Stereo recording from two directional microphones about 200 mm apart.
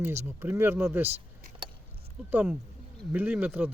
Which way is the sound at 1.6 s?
25° right (ahead or behind).